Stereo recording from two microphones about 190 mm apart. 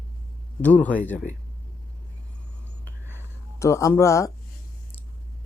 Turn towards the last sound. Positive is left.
turn(degrees=15)  # may be behind; listen again after turning